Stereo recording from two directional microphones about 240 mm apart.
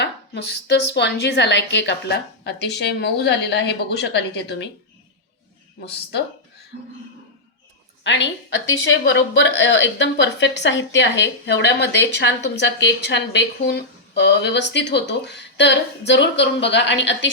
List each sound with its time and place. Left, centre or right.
0.0 s a woman's voice: left
5.8 s a woman's voice: left
8.0 s a woman's voice: left